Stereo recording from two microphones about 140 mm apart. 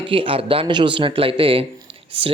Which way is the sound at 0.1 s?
40° right (ahead or behind).